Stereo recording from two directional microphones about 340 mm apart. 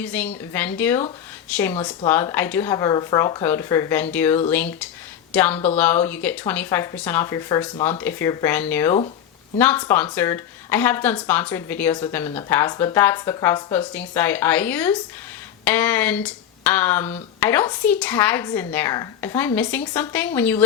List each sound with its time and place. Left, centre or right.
0.0 s speech: centre